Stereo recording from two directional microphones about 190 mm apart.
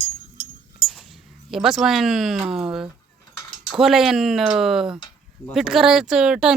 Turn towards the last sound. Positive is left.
turn(degrees=-5)  # may be behind; listen again after turning